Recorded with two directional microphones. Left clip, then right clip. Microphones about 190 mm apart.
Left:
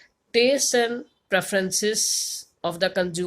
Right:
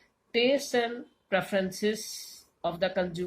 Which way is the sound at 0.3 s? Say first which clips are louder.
Left 6 dB; 50° left (ahead or behind).